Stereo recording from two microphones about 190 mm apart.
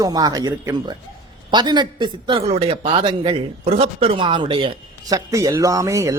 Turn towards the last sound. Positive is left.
turn(degrees=-15)  # may be behind; listen again after turning